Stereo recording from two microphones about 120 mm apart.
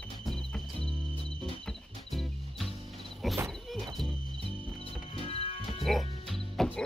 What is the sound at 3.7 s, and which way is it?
Music, centre (ahead or behind).